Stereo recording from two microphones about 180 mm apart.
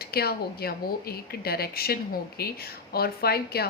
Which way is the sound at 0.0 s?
60° left (ahead or behind).